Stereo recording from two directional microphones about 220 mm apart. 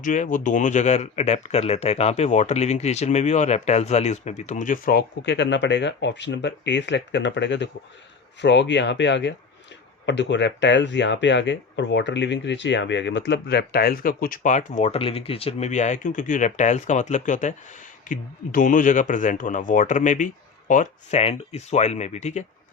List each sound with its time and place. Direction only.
0.0 s speech: 35° left (ahead or behind)